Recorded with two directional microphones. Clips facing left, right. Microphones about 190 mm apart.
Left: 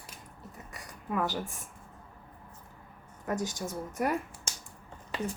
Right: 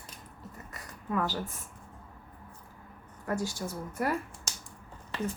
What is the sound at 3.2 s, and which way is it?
Speech, 20° left (ahead or behind).